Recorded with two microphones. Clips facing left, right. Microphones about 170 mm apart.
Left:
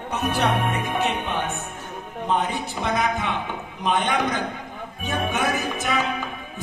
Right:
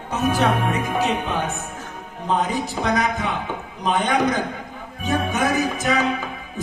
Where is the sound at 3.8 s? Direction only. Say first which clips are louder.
Right 3 dB; 40° right (ahead or behind).